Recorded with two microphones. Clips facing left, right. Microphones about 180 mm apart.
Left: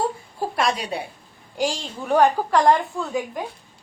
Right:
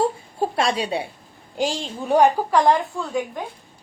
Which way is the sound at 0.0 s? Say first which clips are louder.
Right 3 dB; 25° right (ahead or behind).